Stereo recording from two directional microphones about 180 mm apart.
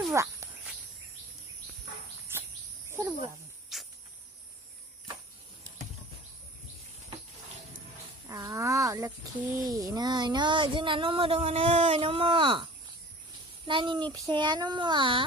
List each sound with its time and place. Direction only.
0.1 s a sound: 15° right (ahead or behind)
2.3 s cricket: 15° right (ahead or behind)
2.9 s a sound: 15° right (ahead or behind)
3.7 s cricket: centre (ahead or behind)
8.3 s speech: 15° right (ahead or behind)
13.7 s speech: 30° right (ahead or behind)